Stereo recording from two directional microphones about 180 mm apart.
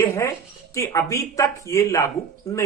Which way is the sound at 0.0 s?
15° left (ahead or behind).